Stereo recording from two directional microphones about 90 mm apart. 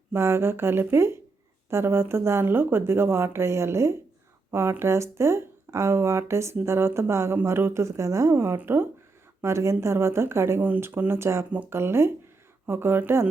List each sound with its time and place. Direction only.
0.1 s speech: 25° right (ahead or behind)